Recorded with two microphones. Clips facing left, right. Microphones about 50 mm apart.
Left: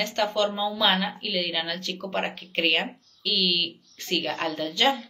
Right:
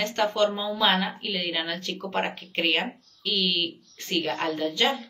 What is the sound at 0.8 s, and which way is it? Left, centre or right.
Speech, centre.